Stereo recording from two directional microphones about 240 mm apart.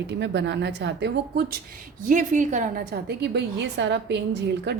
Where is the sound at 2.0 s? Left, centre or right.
Right.